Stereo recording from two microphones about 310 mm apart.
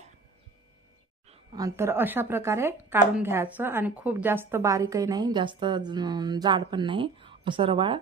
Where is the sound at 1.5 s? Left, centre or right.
Centre.